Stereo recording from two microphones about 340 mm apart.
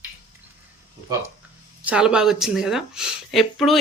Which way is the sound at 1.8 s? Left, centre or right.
Centre.